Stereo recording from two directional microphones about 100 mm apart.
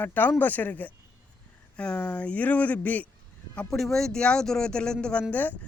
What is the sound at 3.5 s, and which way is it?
A man's voice, 5° left (ahead or behind).